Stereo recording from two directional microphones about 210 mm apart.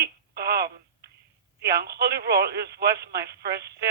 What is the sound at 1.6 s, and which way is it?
Speech, 50° right (ahead or behind).